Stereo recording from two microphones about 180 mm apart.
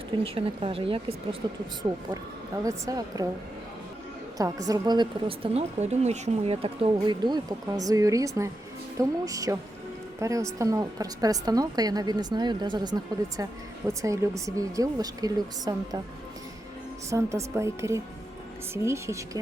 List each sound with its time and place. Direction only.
0.3 s a woman's voice: 30° right (ahead or behind)
4.4 s a woman's voice: 20° right (ahead or behind)
5.5 s a woman's voice: 40° right (ahead or behind); by 16.0 s 20° right (ahead or behind)
17.1 s a woman's voice: 15° right (ahead or behind)